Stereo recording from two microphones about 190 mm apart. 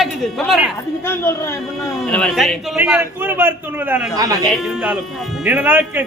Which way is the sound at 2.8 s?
10° right (ahead or behind).